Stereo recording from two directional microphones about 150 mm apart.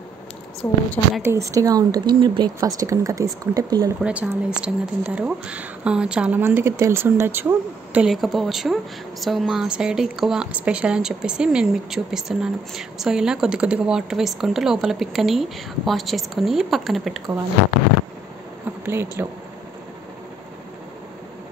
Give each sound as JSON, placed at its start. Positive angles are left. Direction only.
{"t": 0.6, "sound": "a woman's voice", "side_deg": 20}
{"t": 1.2, "sound": "speech", "side_deg": -20}
{"t": 4.0, "sound": "speech", "side_deg": -10}
{"t": 18.9, "sound": "speech", "side_deg": -15}